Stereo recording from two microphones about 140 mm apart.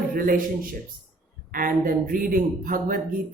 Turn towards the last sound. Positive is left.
turn(degrees=-85)